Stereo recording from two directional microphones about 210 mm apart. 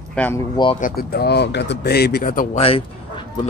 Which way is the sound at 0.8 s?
45° left (ahead or behind).